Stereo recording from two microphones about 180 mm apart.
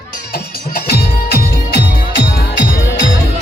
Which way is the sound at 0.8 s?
65° left (ahead or behind).